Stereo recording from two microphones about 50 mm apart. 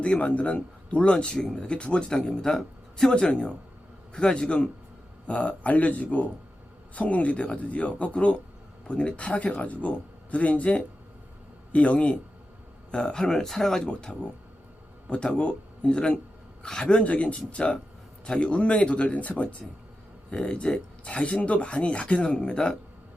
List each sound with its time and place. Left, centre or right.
0.0 s a man's voice: left; by 3.2 s centre
4.1 s a man's voice: centre
12.9 s a man's voice: centre